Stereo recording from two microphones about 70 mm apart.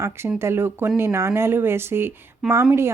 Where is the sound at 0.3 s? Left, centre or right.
Right.